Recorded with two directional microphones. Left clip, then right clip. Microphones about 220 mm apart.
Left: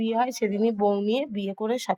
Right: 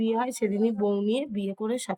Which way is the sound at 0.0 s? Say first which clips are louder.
Left 2 dB; 10° right (ahead or behind).